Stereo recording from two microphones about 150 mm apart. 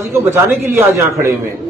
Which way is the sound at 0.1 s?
20° right (ahead or behind).